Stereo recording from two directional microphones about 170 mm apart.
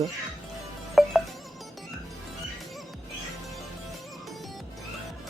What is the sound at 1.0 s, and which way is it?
Music, centre (ahead or behind).